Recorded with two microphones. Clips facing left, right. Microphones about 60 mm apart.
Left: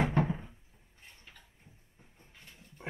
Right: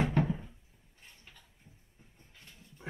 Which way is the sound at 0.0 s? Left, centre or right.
Left.